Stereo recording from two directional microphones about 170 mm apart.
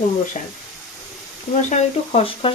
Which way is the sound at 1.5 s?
45° left (ahead or behind).